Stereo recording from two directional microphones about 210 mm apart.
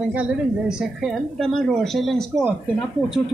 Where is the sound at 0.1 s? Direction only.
5° right (ahead or behind).